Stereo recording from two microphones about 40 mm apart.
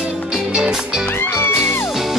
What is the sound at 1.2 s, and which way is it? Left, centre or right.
Music, left.